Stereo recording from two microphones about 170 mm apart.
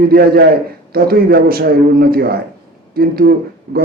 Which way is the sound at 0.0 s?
60° right (ahead or behind).